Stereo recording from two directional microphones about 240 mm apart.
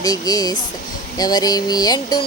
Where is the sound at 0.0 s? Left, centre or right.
Centre.